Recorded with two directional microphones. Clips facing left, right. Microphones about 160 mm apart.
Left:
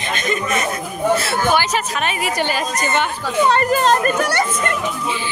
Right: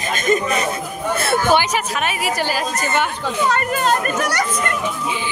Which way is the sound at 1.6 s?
10° right (ahead or behind).